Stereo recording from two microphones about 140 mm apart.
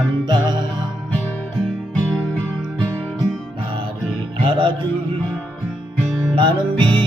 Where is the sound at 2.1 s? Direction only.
5° left (ahead or behind).